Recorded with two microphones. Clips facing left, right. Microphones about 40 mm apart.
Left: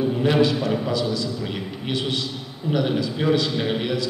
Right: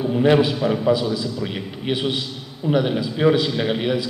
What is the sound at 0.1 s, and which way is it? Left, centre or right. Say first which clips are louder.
A man's voice: right 6 dB; centre.